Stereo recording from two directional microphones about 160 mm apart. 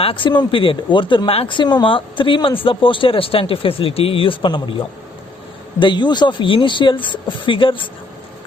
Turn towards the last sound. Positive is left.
turn(degrees=35)  # may be behind; listen again after turning